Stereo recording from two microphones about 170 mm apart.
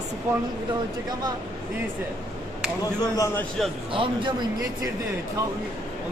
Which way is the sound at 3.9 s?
30° right (ahead or behind).